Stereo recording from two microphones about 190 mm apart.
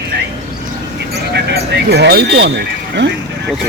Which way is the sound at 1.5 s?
55° right (ahead or behind).